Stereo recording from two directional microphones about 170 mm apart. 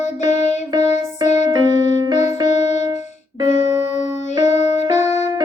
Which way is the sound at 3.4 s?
45° left (ahead or behind).